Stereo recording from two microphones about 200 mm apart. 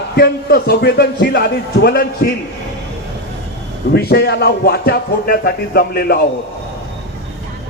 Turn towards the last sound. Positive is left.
turn(degrees=50)  # may be behind; listen again after turning